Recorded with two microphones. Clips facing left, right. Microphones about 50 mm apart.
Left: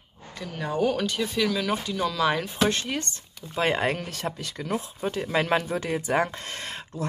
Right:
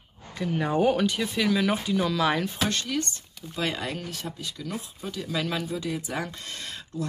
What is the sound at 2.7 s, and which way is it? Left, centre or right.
Speech, left.